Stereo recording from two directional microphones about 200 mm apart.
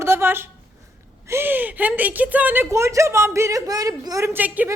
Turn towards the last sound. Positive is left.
turn(degrees=-10)  # may be behind; listen again after turning